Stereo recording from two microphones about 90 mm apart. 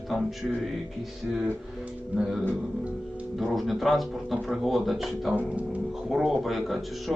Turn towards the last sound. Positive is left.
turn(degrees=0)  # may be behind; listen again after turning